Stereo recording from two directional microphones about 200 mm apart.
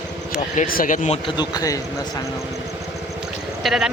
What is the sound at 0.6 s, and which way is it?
Speech, 40° left (ahead or behind).